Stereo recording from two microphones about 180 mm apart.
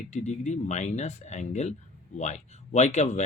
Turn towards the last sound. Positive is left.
turn(degrees=40)  # may be behind; listen again after turning